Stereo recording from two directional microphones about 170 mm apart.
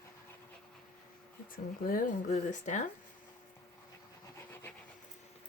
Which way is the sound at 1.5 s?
55° left (ahead or behind).